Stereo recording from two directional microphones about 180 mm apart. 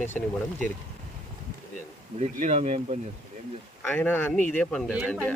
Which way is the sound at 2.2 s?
35° right (ahead or behind).